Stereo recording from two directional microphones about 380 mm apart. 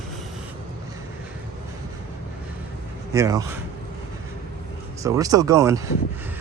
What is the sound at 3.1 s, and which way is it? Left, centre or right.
Speech, centre.